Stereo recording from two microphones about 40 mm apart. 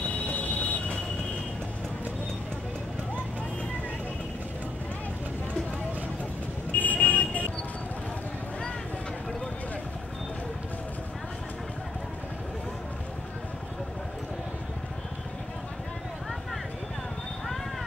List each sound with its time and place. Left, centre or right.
0.3 s train: left
6.7 s vehicle: left